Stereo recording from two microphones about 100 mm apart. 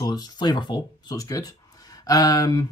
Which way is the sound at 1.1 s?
35° left (ahead or behind).